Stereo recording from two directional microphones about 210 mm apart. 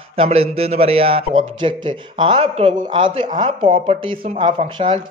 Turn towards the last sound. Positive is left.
turn(degrees=-20)  # may be behind; listen again after turning